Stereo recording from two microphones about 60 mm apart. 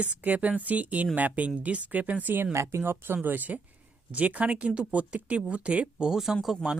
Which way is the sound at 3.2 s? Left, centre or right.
Right.